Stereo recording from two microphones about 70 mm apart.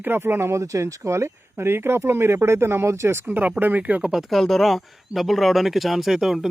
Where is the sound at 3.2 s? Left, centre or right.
Right.